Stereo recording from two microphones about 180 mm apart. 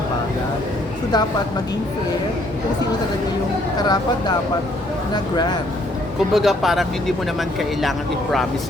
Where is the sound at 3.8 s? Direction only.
20° left (ahead or behind).